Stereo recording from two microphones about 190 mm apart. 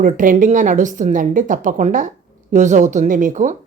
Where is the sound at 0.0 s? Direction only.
45° right (ahead or behind).